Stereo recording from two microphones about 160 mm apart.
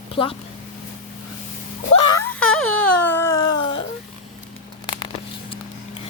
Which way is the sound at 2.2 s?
10° left (ahead or behind).